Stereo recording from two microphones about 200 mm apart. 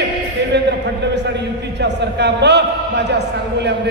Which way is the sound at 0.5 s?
60° right (ahead or behind).